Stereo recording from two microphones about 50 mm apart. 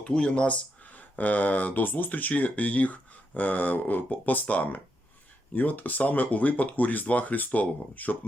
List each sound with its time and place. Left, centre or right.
0.0 s speech: left